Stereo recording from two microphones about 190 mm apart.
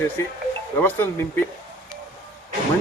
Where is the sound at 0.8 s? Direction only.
10° left (ahead or behind).